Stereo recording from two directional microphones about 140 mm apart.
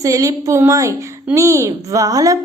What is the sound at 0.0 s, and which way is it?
A woman's voice, 25° right (ahead or behind).